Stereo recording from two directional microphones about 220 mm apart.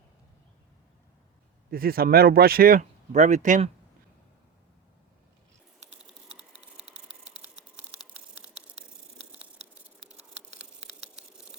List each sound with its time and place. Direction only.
1.7 s speech: 40° right (ahead or behind)
7.6 s typing: 5° right (ahead or behind)
10.5 s a sound: 5° right (ahead or behind)